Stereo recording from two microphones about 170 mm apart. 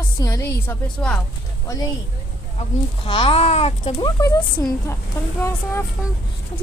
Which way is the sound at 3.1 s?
30° left (ahead or behind).